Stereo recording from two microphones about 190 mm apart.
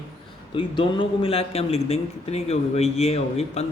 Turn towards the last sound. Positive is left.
turn(degrees=35)  # may be behind; listen again after turning